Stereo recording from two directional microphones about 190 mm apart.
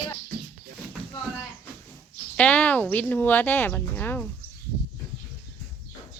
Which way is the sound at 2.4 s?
5° left (ahead or behind).